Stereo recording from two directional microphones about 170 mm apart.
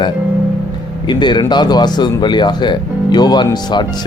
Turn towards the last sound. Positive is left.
turn(degrees=25)  # may be behind; listen again after turning